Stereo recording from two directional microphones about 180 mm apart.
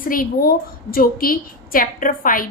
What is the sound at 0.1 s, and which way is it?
A woman's voice, 55° left (ahead or behind).